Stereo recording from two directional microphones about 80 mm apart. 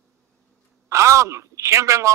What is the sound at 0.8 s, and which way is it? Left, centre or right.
Speech, right.